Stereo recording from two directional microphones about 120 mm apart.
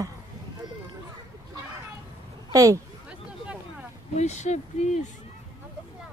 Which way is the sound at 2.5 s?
30° right (ahead or behind).